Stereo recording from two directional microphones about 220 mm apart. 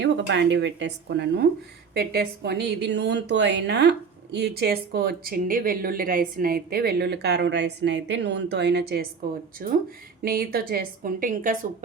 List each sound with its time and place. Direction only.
0.0 s speech: 55° right (ahead or behind); by 11.5 s 40° right (ahead or behind)